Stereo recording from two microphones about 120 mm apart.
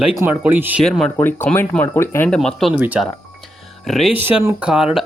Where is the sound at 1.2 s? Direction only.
15° left (ahead or behind).